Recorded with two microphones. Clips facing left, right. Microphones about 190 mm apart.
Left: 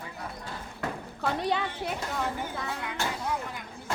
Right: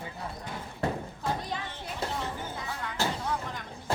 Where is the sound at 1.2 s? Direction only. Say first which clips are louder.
Left 9 dB; 70° left (ahead or behind).